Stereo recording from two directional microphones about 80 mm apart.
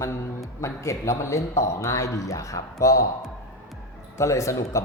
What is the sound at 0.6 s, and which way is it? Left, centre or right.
A man's voice, left.